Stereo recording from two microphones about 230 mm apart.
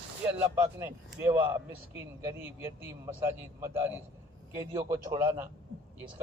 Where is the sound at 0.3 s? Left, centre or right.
Centre.